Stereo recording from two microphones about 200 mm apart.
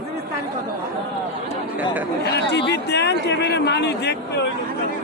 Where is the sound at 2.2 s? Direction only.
55° left (ahead or behind).